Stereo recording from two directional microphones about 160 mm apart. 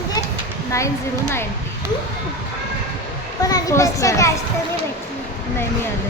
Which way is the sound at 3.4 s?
20° left (ahead or behind).